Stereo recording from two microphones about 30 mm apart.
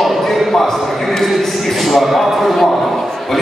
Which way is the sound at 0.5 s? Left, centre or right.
Centre.